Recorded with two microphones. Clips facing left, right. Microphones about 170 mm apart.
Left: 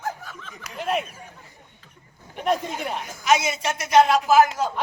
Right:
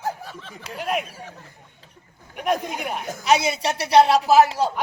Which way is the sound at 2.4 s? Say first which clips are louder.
Even; centre (ahead or behind).